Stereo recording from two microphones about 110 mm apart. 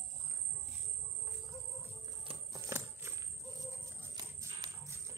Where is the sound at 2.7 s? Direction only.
25° right (ahead or behind).